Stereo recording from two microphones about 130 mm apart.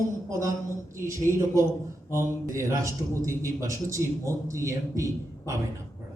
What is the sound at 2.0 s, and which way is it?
A man's voice, 20° right (ahead or behind).